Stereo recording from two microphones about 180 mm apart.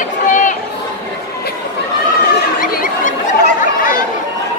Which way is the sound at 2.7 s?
50° left (ahead or behind).